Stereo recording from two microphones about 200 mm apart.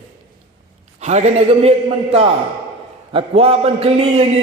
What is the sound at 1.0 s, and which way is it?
Speech, 35° right (ahead or behind).